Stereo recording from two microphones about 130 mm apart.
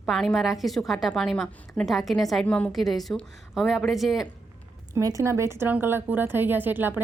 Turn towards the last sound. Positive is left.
turn(degrees=-15)  # may be behind; listen again after turning